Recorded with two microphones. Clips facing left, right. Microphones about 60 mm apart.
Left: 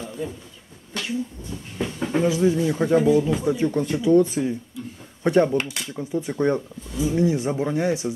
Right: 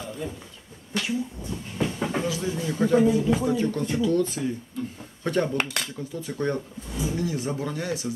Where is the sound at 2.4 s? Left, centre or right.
Centre.